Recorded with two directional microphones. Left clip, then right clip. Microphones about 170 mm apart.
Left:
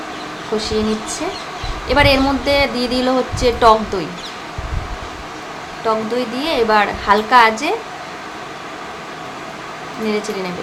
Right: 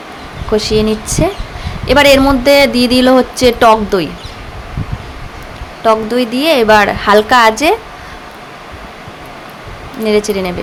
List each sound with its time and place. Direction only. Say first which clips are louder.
0.5 s speech: right 7 dB; 40° right (ahead or behind)
5.8 s speech: right 7 dB; 40° right (ahead or behind)
10.1 s speech: right 9 dB; 40° right (ahead or behind)